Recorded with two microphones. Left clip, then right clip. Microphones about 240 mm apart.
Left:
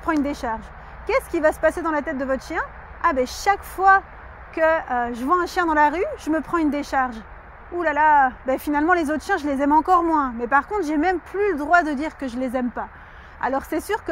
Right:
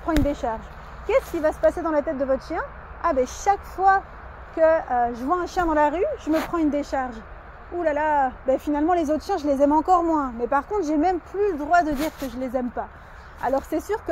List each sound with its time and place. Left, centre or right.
0.3 s speech: left